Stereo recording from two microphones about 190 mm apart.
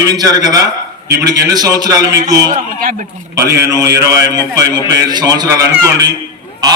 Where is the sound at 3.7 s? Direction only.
20° right (ahead or behind).